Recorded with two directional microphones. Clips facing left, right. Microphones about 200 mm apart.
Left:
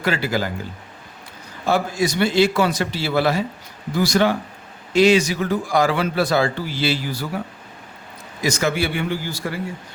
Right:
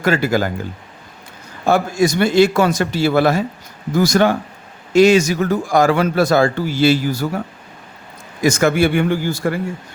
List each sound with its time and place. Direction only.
0.0 s a man's voice: 45° right (ahead or behind)
1.6 s a man's voice: 50° right (ahead or behind)